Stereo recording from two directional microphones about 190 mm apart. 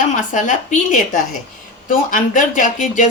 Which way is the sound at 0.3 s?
45° left (ahead or behind).